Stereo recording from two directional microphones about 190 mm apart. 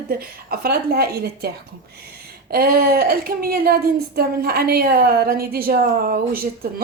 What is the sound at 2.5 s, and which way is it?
Speech, 50° right (ahead or behind).